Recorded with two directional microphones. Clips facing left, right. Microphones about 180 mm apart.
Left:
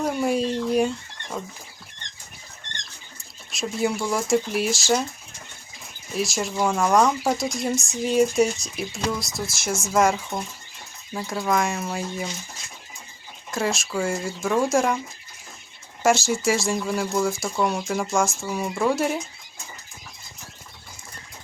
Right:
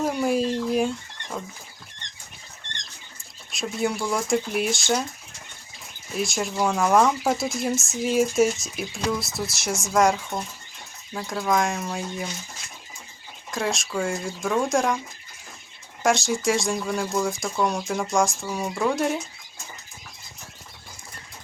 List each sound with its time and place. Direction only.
0.0 s fowl: centre (ahead or behind)
3.5 s speech: centre (ahead or behind)
6.1 s speech: centre (ahead or behind)
13.5 s speech: centre (ahead or behind)
16.0 s speech: centre (ahead or behind)